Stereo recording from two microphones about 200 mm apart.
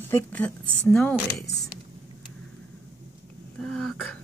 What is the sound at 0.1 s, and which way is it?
A woman's voice, 10° left (ahead or behind).